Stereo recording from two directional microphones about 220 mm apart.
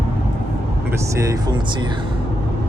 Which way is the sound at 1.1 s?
15° right (ahead or behind).